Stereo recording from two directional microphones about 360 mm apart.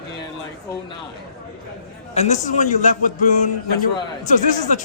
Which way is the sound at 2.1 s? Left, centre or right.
Centre.